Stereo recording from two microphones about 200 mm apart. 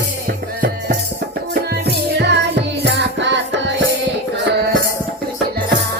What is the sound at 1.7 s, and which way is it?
Music, 60° right (ahead or behind).